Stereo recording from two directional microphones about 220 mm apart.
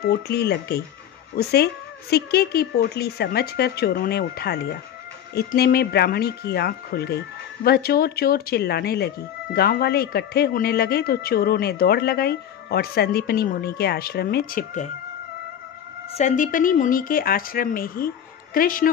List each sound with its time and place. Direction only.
0.1 s speech: 45° left (ahead or behind)
16.2 s speech: 35° left (ahead or behind)